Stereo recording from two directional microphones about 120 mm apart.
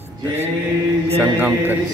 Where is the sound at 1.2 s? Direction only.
15° right (ahead or behind).